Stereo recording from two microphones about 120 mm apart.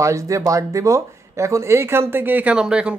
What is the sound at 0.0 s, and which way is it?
Speech, 25° right (ahead or behind).